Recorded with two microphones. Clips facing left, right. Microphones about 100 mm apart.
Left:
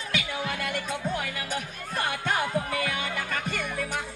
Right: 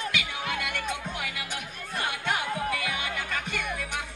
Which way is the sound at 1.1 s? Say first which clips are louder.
Left 4 dB; 40° left (ahead or behind).